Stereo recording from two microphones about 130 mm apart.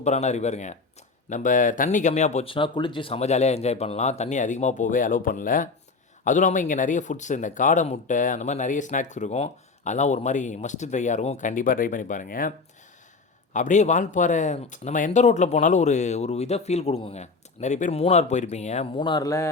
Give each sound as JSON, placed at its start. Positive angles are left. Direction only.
{"t": 0.0, "sound": "speech", "side_deg": 60}
{"t": 1.3, "sound": "speech", "side_deg": 80}
{"t": 2.5, "sound": "speech", "side_deg": 40}
{"t": 6.2, "sound": "speech", "side_deg": 80}
{"t": 13.5, "sound": "speech", "side_deg": 70}
{"t": 17.9, "sound": "speech", "side_deg": 55}
{"t": 18.9, "sound": "speech", "side_deg": 35}